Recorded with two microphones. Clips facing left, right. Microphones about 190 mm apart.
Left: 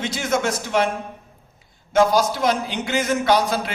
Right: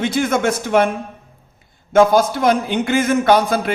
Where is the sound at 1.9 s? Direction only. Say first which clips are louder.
Right 4 dB; 55° right (ahead or behind).